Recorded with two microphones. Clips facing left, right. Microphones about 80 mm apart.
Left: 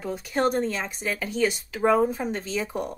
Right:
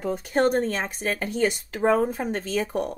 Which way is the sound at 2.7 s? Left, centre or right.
Centre.